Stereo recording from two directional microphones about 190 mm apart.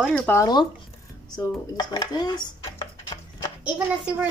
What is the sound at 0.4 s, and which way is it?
Speech, 20° left (ahead or behind).